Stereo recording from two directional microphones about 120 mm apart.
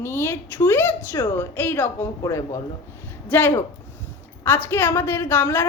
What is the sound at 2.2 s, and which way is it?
Speech, 30° left (ahead or behind).